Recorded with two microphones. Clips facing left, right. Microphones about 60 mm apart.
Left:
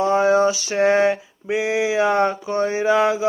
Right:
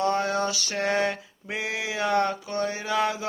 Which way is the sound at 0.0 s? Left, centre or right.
Centre.